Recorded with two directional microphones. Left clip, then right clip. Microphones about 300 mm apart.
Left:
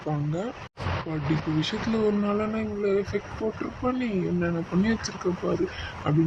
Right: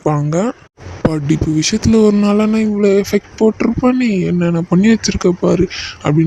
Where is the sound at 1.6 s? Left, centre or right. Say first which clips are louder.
Right 15 dB; right.